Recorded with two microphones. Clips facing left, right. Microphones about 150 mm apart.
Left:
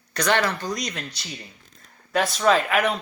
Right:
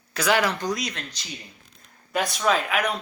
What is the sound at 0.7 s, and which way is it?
Speech, 5° right (ahead or behind).